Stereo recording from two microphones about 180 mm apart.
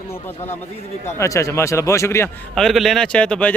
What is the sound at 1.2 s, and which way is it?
A man's voice, 15° left (ahead or behind).